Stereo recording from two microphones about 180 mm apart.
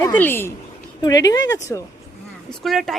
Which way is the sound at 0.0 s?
10° left (ahead or behind).